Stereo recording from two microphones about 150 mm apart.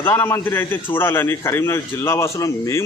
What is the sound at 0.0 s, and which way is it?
A man's voice, 15° left (ahead or behind).